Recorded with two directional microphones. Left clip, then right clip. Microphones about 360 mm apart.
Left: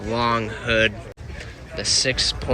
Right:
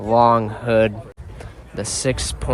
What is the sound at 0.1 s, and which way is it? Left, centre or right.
Speech, centre.